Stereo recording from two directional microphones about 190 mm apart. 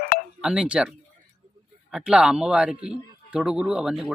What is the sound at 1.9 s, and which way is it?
A man's voice, 5° right (ahead or behind).